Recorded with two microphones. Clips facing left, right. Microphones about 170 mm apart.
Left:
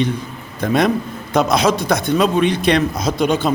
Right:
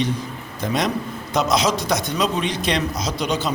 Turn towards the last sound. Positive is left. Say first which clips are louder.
# left 6 dB
turn(degrees=55)  # may be behind; listen again after turning